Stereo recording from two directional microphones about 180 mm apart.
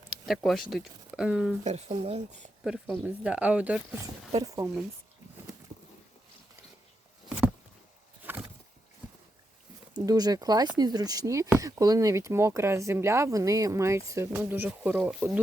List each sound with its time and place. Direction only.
0.3 s speech: centre (ahead or behind)
1.6 s speech: 35° right (ahead or behind)
2.6 s speech: centre (ahead or behind)
4.4 s speech: 20° right (ahead or behind)
8.2 s vehicle: 10° right (ahead or behind)
9.9 s speech: 20° right (ahead or behind)